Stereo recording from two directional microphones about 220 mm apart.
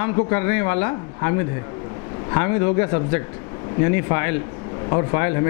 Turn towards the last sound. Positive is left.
turn(degrees=15)  # may be behind; listen again after turning